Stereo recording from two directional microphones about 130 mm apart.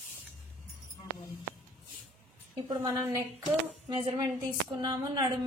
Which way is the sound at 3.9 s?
35° right (ahead or behind).